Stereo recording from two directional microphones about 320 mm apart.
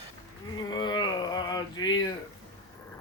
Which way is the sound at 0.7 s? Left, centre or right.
Centre.